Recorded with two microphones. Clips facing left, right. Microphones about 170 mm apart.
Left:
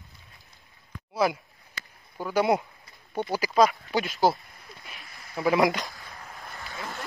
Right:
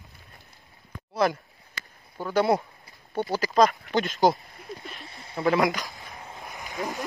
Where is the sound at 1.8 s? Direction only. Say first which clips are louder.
Right 1 dB; 70° right (ahead or behind).